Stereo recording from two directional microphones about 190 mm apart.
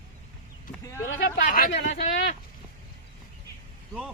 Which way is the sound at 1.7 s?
35° left (ahead or behind).